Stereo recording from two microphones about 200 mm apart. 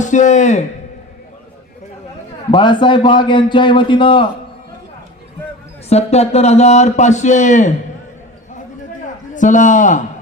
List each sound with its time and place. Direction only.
0.0 s a man's voice: 40° left (ahead or behind)
2.5 s a man's voice: 25° left (ahead or behind)
5.9 s a man's voice: 30° left (ahead or behind)
9.3 s a man's voice: 40° left (ahead or behind)